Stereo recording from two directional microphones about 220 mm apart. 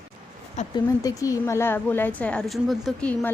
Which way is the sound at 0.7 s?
15° left (ahead or behind).